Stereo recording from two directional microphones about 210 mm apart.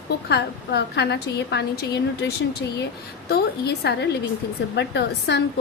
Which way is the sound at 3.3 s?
50° left (ahead or behind).